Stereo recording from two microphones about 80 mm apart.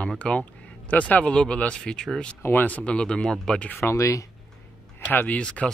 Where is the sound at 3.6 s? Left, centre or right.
Left.